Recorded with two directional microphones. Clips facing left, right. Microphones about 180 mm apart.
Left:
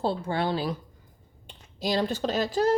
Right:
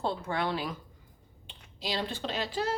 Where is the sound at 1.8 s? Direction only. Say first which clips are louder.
Left 7 dB; 45° left (ahead or behind).